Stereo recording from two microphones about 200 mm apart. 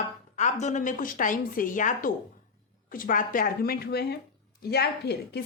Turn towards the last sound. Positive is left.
turn(degrees=55)  # may be behind; listen again after turning